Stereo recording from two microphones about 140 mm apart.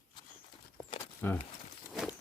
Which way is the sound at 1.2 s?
15° left (ahead or behind).